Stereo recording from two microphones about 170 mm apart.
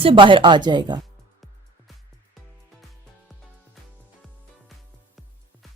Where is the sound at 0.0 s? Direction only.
30° right (ahead or behind).